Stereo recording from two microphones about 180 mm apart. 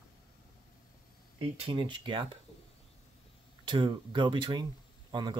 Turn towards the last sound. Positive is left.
turn(degrees=-25)  # may be behind; listen again after turning